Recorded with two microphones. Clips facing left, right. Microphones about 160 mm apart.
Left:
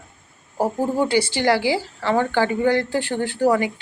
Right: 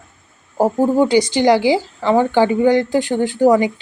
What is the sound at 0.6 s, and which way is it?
Speech, 45° right (ahead or behind).